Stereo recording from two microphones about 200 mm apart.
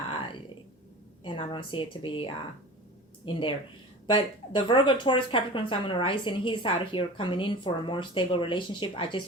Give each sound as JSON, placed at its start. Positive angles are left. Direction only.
{"t": 1.2, "sound": "a woman's voice", "side_deg": 25}